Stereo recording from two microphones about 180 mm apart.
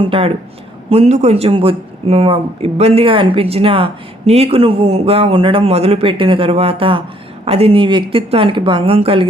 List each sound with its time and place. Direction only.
0.0 s a man's voice: 30° right (ahead or behind)